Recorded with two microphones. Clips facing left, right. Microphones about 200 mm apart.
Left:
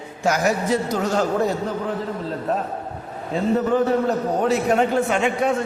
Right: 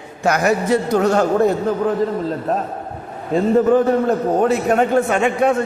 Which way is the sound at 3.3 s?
50° right (ahead or behind).